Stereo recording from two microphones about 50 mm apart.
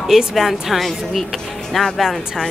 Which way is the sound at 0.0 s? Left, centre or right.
Centre.